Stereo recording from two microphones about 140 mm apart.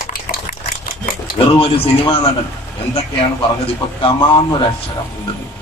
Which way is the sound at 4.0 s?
40° left (ahead or behind).